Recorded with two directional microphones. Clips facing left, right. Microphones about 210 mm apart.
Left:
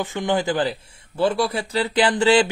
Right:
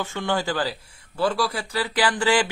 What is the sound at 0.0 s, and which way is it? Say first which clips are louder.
Speech: left 3 dB; 15° left (ahead or behind).